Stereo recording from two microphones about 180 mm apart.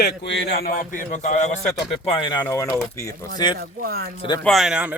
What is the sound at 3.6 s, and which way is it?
Speech, 60° right (ahead or behind).